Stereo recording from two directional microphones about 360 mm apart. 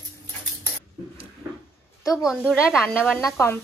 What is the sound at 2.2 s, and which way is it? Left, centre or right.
Speech, centre.